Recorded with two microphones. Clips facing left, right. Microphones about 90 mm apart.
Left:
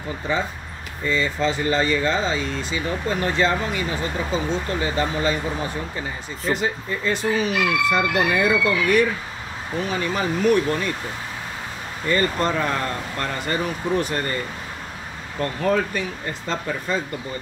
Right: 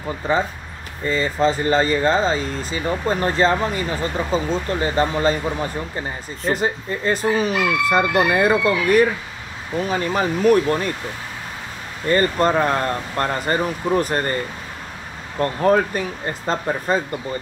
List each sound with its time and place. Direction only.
0.2 s speech: 40° right (ahead or behind)
12.1 s speech: 40° right (ahead or behind)